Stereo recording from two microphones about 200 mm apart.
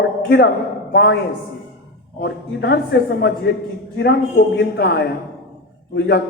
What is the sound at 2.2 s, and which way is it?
Speech, 55° left (ahead or behind).